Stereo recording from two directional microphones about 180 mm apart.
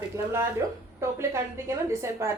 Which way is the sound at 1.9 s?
15° right (ahead or behind).